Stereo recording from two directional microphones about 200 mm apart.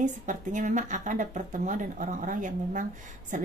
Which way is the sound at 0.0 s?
40° right (ahead or behind).